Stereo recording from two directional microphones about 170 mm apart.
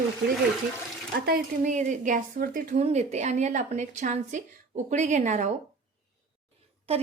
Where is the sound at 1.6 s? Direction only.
45° right (ahead or behind).